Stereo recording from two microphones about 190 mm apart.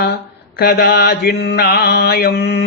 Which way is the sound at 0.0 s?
55° left (ahead or behind).